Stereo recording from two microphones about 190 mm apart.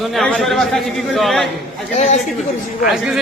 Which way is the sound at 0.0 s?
Centre (ahead or behind).